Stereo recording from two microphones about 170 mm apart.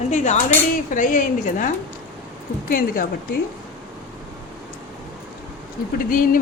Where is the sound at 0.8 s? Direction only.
50° left (ahead or behind).